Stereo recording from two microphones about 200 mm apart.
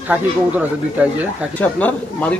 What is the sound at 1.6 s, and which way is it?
Speech, 10° left (ahead or behind).